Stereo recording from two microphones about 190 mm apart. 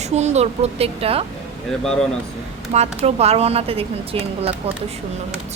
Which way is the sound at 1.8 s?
5° left (ahead or behind).